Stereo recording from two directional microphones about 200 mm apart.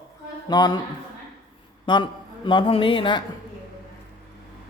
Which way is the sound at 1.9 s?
25° left (ahead or behind).